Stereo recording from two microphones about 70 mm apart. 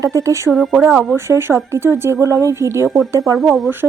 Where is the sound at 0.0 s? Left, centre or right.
Right.